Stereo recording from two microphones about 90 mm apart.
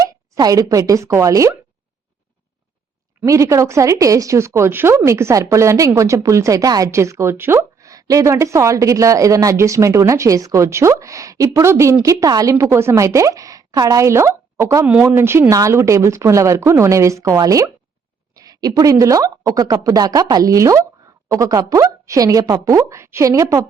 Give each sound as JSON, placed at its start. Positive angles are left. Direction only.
{"t": 0.3, "sound": "speech", "side_deg": -45}
{"t": 3.2, "sound": "speech", "side_deg": -35}
{"t": 6.9, "sound": "a woman's voice", "side_deg": -30}